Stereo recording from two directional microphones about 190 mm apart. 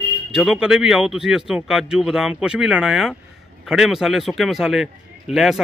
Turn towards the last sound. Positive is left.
turn(degrees=0)  # may be behind; listen again after turning